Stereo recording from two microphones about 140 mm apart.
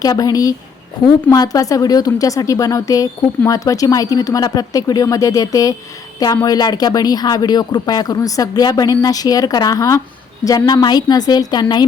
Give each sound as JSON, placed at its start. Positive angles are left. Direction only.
{"t": 0.0, "sound": "a woman's voice", "side_deg": 25}